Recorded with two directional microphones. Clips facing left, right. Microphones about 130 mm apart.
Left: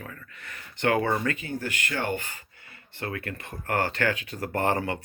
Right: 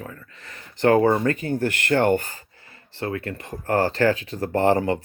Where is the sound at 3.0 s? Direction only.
30° right (ahead or behind).